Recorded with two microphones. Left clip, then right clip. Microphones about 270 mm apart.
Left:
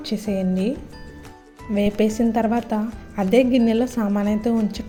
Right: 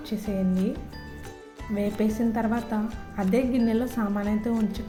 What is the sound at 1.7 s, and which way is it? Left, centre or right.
Speech, left.